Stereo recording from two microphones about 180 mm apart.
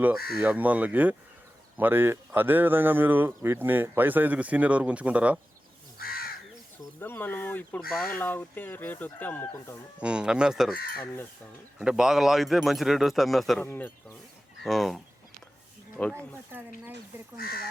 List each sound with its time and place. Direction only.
0.2 s speech: 55° left (ahead or behind)
0.4 s speech: 10° right (ahead or behind)
6.0 s crow: 55° left (ahead or behind)
7.0 s a sound: 10° left (ahead or behind)
8.1 s speech: 10° left (ahead or behind)
10.0 s speech: 5° right (ahead or behind)
11.0 s speech: 10° left (ahead or behind)
11.8 s speech: 5° right (ahead or behind)
13.7 s speech: 10° left (ahead or behind)
14.6 s speech: centre (ahead or behind)
16.5 s speech: 10° right (ahead or behind)
17.3 s speech: 55° left (ahead or behind)